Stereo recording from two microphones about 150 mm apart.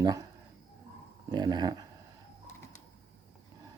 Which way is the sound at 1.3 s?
30° right (ahead or behind).